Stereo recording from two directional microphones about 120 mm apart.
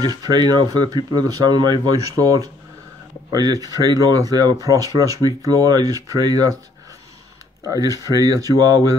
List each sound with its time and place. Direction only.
0.0 s speech: 35° right (ahead or behind)
7.6 s speech: 30° right (ahead or behind)